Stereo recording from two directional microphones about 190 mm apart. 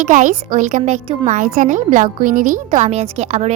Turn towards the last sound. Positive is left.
turn(degrees=-35)  # may be behind; listen again after turning